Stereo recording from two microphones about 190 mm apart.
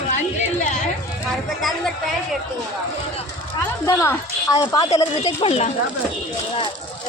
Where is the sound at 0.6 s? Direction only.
40° left (ahead or behind).